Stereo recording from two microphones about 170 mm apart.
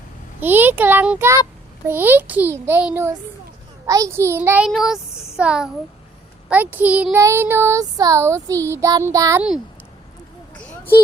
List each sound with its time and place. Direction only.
0.3 s child singing: 10° right (ahead or behind)
4.7 s a child's voice: centre (ahead or behind)
6.5 s child singing: 10° right (ahead or behind)
10.6 s a sound: 10° left (ahead or behind)